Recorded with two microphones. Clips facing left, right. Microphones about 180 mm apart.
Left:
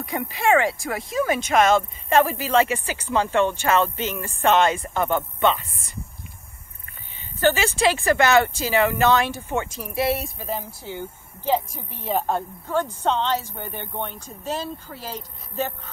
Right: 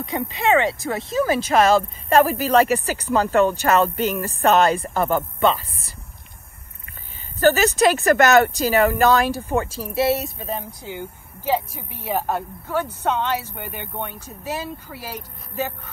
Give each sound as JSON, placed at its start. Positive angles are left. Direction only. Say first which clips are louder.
{"t": 0.0, "sound": "speech", "louder": "right 1 dB", "side_deg": -20}
{"t": 7.3, "sound": "speech", "louder": "right 4 dB", "side_deg": -40}